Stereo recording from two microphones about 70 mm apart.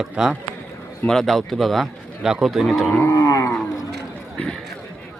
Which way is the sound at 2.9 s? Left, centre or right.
Left.